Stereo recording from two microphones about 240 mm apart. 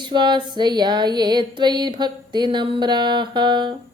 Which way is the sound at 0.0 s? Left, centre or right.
Centre.